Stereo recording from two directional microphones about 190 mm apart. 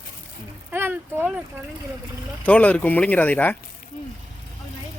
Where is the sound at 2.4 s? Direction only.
10° left (ahead or behind).